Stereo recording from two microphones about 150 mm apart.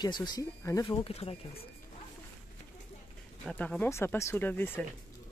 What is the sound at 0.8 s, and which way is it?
Speech, 40° left (ahead or behind).